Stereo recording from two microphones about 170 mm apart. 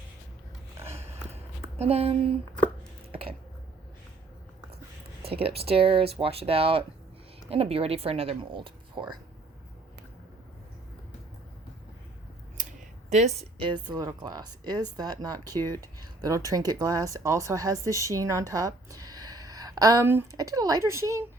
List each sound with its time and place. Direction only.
1.8 s speech: 35° right (ahead or behind)
3.1 s a sound: 35° right (ahead or behind)
5.2 s speech: 35° right (ahead or behind)
12.6 s scissors: 50° right (ahead or behind)
13.1 s speech: 40° right (ahead or behind); by 21.2 s 15° right (ahead or behind)